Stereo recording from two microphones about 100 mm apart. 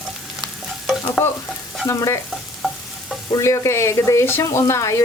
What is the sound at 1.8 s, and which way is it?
Stir, 30° left (ahead or behind).